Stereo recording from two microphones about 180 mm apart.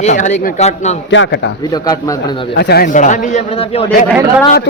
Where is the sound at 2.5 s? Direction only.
60° left (ahead or behind).